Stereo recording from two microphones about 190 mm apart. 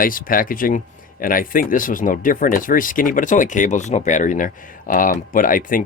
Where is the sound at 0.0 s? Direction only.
45° left (ahead or behind).